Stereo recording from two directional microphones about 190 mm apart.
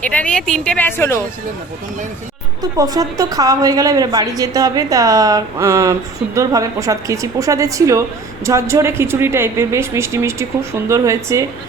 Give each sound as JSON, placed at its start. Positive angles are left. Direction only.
{"t": 0.0, "sound": "a woman's voice", "side_deg": 5}
{"t": 2.6, "sound": "a woman's voice", "side_deg": -20}